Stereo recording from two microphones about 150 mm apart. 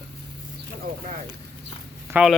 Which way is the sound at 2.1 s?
20° right (ahead or behind).